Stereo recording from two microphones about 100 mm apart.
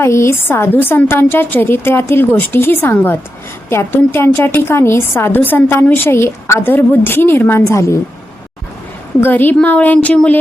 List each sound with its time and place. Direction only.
0.0 s a woman's voice: 25° left (ahead or behind)
9.2 s a woman's voice: 20° left (ahead or behind)